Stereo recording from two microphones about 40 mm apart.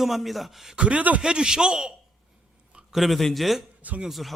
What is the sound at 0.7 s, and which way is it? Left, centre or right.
Speech, right.